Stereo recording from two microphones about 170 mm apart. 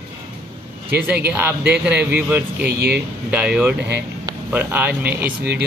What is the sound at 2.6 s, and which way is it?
Speech, 65° right (ahead or behind).